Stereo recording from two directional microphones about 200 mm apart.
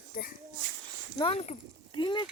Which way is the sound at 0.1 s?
45° left (ahead or behind).